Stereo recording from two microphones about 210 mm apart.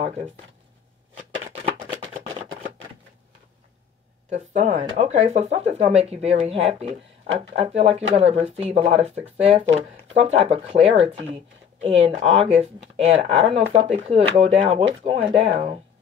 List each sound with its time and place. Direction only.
4.3 s speech: 30° right (ahead or behind)